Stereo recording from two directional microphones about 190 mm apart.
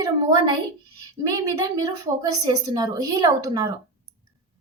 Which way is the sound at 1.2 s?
20° right (ahead or behind).